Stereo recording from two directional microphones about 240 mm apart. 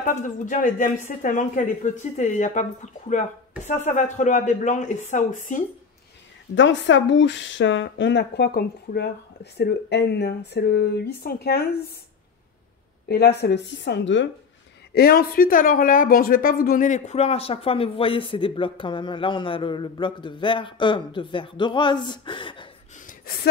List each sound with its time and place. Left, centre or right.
0.0 s speech: left
6.5 s speech: left
13.1 s speech: left; by 22.7 s centre